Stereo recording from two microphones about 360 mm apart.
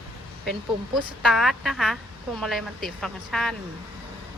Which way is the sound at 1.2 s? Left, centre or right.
Centre.